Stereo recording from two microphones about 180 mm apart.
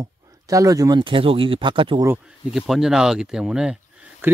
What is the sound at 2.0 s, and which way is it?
Speech, 10° right (ahead or behind).